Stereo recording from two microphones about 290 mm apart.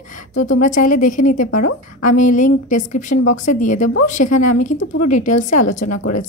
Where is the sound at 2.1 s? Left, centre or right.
Left.